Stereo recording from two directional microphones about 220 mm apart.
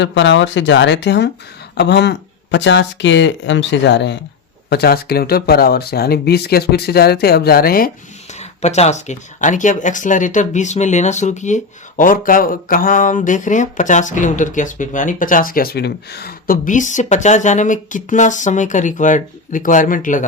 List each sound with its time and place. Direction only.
0.0 s speech: 55° left (ahead or behind)
8.4 s speech: 30° left (ahead or behind)